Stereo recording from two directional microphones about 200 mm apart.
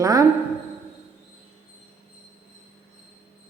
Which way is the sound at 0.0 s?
15° right (ahead or behind).